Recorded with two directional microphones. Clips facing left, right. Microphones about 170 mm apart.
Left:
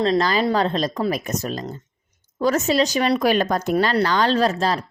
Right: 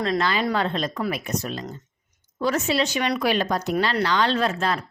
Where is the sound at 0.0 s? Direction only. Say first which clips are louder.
Left 4 dB; 35° left (ahead or behind).